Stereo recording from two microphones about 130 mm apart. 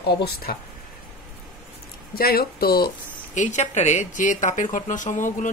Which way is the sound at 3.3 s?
70° left (ahead or behind).